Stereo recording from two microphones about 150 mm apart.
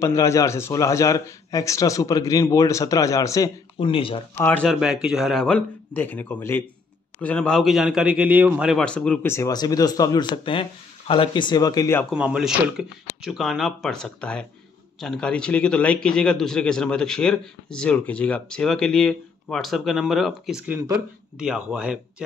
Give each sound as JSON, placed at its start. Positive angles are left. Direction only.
{"t": 0.0, "sound": "a man's voice", "side_deg": 20}
{"t": 3.7, "sound": "speech", "side_deg": 35}
{"t": 4.4, "sound": "speech", "side_deg": 15}
{"t": 4.6, "sound": "a man's voice", "side_deg": -5}
{"t": 8.7, "sound": "speech", "side_deg": 5}
{"t": 9.3, "sound": "a man's voice", "side_deg": 20}
{"t": 12.1, "sound": "a man's voice", "side_deg": -5}